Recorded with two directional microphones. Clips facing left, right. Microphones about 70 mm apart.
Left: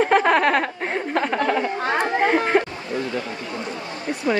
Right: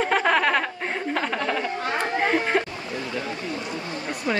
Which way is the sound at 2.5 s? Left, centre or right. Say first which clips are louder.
Left 4 dB; centre.